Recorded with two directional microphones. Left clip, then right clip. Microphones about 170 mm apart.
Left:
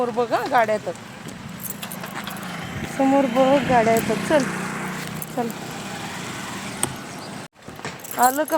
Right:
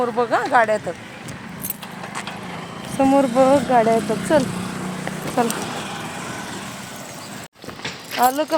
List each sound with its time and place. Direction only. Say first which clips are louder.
0.0 s speech: right 2 dB; 30° right (ahead or behind)
3.0 s speech: right 3 dB; 5° right (ahead or behind)
4.6 s vehicle: left 1 dB; 60° right (ahead or behind)
5.4 s speech: right 6 dB; 5° right (ahead or behind)
8.2 s speech: right 1 dB; 10° right (ahead or behind)